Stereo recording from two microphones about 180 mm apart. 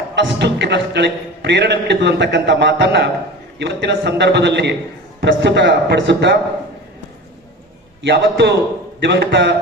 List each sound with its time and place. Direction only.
0.2 s a man's voice: 75° right (ahead or behind)
8.0 s a man's voice: 70° right (ahead or behind)
9.0 s a man's voice: 90° right